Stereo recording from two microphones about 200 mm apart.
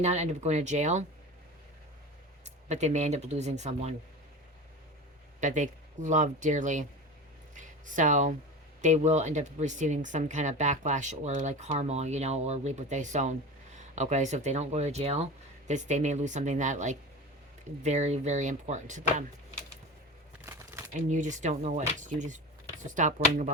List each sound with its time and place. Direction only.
0.0 s speech: 35° right (ahead or behind)
2.6 s speech: 35° right (ahead or behind)
5.4 s speech: 40° right (ahead or behind)
20.4 s crumpling: 10° right (ahead or behind)
21.1 s speech: 40° right (ahead or behind)